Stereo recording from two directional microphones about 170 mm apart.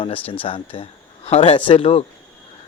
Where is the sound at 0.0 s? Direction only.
35° left (ahead or behind).